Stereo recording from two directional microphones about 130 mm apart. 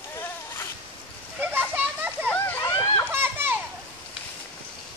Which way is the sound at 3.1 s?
15° right (ahead or behind).